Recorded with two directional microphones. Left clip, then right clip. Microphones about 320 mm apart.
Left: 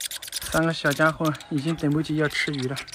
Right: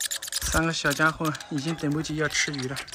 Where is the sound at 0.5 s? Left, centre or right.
Centre.